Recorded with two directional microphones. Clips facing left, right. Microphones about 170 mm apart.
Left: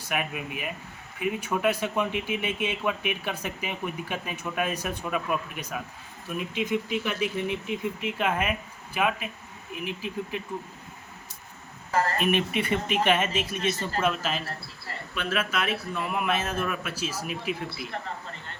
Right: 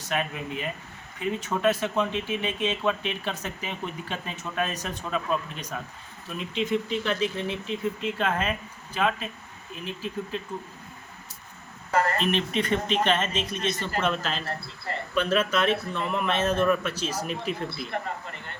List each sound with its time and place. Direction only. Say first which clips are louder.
0.1 s speech: right 1 dB; 15° left (ahead or behind)
12.2 s speech: even; 10° left (ahead or behind)